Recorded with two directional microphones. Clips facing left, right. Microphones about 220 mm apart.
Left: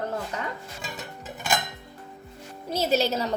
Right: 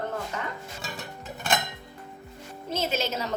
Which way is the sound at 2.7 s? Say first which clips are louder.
Left 5 dB; 35° left (ahead or behind).